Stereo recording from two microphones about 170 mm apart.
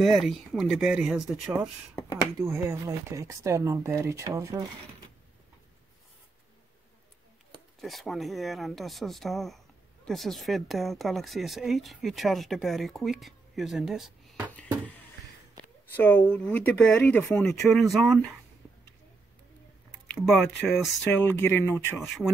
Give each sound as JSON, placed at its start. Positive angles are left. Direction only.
{"t": 0.0, "sound": "a woman's voice", "side_deg": 0}
{"t": 2.4, "sound": "speech", "side_deg": -15}
{"t": 7.8, "sound": "a woman's voice", "side_deg": 0}
{"t": 16.0, "sound": "a woman's voice", "side_deg": 10}
{"t": 20.2, "sound": "a woman's voice", "side_deg": 0}
{"t": 21.0, "sound": "speech", "side_deg": 10}
{"t": 21.9, "sound": "a woman's voice", "side_deg": 0}